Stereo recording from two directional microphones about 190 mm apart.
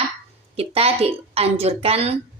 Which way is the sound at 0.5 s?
30° right (ahead or behind).